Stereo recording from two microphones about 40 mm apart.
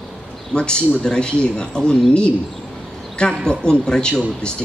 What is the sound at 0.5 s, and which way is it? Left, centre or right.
Speech, left.